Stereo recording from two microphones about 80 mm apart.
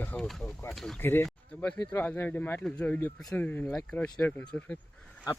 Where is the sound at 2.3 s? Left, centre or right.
Centre.